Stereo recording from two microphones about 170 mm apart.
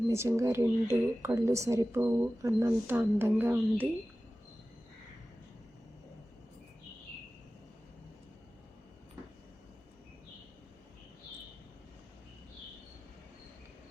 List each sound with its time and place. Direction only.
0.1 s a woman's voice: 15° right (ahead or behind)